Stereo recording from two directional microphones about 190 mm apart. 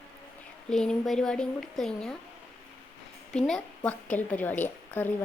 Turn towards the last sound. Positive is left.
turn(degrees=10)  # may be behind; listen again after turning